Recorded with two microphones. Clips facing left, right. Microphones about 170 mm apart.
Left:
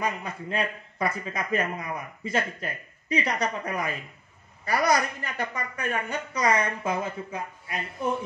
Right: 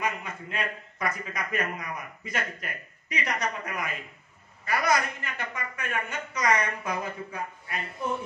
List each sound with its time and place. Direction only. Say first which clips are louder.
0.0 s a man's voice: left 2 dB; 35° left (ahead or behind)